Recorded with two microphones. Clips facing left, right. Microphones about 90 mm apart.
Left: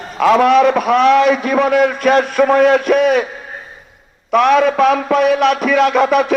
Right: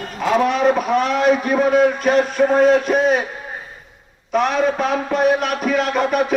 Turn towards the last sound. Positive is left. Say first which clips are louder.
# left 6 dB
turn(degrees=85)